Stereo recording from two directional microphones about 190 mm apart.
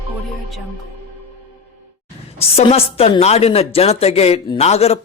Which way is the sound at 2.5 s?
30° left (ahead or behind).